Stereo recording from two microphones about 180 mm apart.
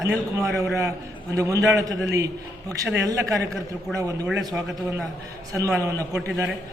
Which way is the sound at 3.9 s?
Centre (ahead or behind).